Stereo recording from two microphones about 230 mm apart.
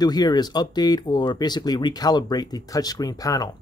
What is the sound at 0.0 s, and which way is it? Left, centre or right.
Speech, centre.